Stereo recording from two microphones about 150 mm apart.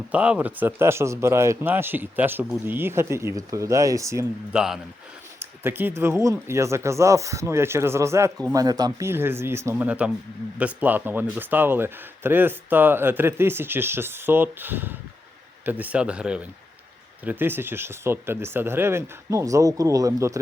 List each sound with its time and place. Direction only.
0.1 s speech: 10° right (ahead or behind)
4.5 s a man's voice: 5° right (ahead or behind)
5.6 s speech: 15° right (ahead or behind)